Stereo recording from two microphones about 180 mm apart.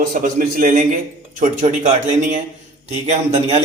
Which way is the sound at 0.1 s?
50° right (ahead or behind).